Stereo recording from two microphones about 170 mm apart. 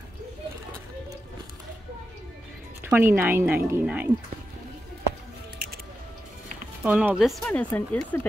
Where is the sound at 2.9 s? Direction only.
10° right (ahead or behind).